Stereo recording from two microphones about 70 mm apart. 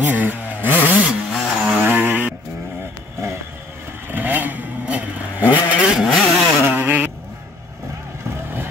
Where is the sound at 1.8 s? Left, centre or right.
Right.